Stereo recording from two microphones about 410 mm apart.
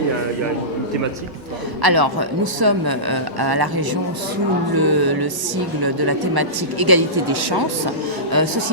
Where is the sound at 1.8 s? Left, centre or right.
Right.